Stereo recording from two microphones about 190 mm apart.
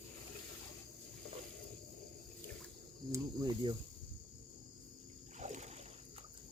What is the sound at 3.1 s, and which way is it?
Speech, 20° right (ahead or behind).